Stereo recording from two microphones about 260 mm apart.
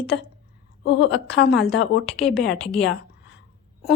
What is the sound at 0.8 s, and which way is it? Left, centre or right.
Speech, left.